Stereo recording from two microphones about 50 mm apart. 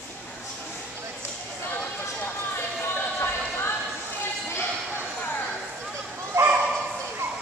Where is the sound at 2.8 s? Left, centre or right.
Left.